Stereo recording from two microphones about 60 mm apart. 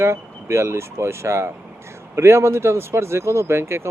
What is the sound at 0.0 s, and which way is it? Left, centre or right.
Speech, right.